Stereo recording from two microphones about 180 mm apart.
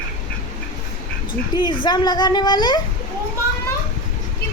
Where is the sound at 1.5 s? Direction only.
25° left (ahead or behind).